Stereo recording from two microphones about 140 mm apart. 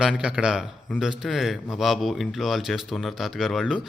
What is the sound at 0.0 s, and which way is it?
Speech, 5° right (ahead or behind).